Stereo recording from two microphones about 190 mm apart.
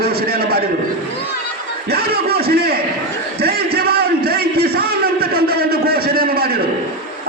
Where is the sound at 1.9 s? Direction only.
55° right (ahead or behind).